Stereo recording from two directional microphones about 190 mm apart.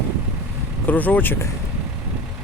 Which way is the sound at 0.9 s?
10° left (ahead or behind).